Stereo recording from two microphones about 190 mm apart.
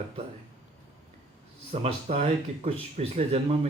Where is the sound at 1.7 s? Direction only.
30° right (ahead or behind).